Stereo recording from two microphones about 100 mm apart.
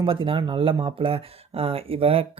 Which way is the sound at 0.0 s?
60° right (ahead or behind).